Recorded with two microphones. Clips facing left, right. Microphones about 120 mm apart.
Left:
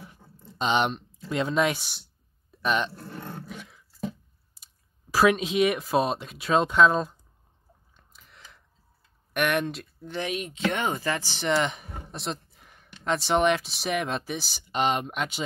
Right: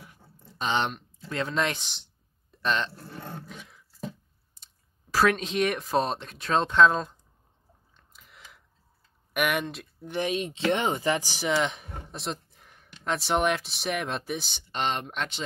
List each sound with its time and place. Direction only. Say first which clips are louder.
0.0 s a sound: left 4 dB; 25° left (ahead or behind)
0.7 s speech: left 3 dB; 15° left (ahead or behind)
2.5 s a sound: left 2 dB; 10° left (ahead or behind)
2.9 s roar: left 2 dB; centre (ahead or behind)
4.6 s clicking: even; 10° left (ahead or behind)
5.1 s speech: left 2 dB; 10° left (ahead or behind)
8.1 s chewing: even; centre (ahead or behind)
9.3 s speech: left 2 dB; 5° right (ahead or behind)
10.0 s speech: right 3 dB; 15° right (ahead or behind)
10.3 s speech: right 1 dB; 30° right (ahead or behind)
11.4 s speech: left 2 dB; centre (ahead or behind)
14.7 s speech: left 4 dB; 15° left (ahead or behind)